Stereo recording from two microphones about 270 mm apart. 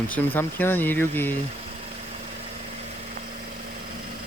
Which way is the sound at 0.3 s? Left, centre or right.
Centre.